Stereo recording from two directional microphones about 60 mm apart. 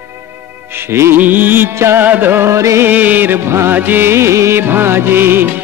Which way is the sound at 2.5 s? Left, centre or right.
Right.